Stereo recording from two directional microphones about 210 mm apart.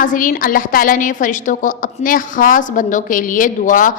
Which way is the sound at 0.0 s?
40° left (ahead or behind).